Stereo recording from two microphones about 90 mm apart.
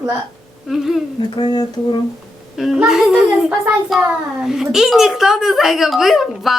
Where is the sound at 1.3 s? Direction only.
60° left (ahead or behind).